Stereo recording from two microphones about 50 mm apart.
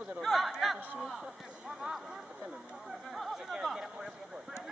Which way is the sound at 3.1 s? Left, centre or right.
Centre.